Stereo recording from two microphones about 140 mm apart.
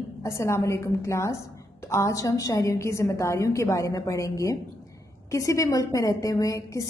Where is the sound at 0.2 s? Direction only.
20° left (ahead or behind).